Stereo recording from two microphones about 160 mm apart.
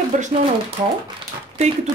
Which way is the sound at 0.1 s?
55° right (ahead or behind).